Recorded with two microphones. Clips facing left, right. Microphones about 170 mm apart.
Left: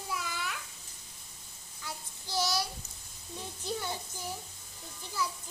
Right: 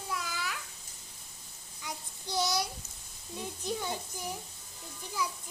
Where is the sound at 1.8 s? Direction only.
20° right (ahead or behind).